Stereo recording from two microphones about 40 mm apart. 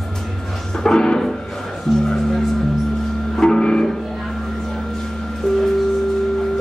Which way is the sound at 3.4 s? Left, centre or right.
Left.